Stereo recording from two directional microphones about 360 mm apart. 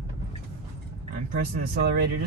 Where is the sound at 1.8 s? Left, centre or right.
Right.